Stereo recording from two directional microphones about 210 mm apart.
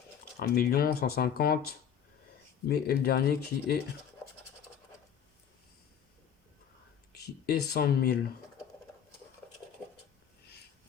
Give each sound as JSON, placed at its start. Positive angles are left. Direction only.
{"t": 0.3, "sound": "speech", "side_deg": 45}
{"t": 7.1, "sound": "speech", "side_deg": 50}
{"t": 9.8, "sound": "a sound", "side_deg": 5}